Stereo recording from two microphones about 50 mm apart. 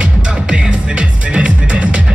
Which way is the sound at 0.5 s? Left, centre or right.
Right.